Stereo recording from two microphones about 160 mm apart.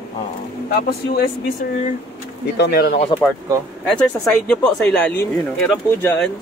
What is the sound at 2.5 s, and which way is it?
Speech, 85° left.